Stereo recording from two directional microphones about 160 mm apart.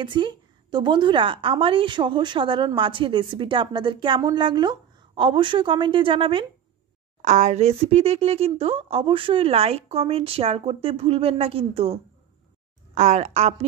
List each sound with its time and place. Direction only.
0.0 s a woman's voice: 30° right (ahead or behind)
7.2 s a woman's voice: 45° right (ahead or behind)